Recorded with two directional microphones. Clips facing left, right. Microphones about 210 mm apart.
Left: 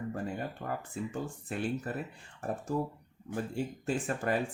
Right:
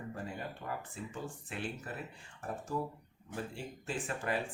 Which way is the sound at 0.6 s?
65° left (ahead or behind).